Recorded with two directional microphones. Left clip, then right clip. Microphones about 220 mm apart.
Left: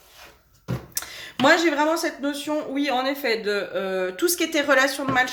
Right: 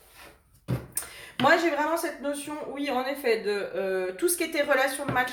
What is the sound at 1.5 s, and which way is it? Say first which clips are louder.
Speech: left 4 dB; 40° left (ahead or behind).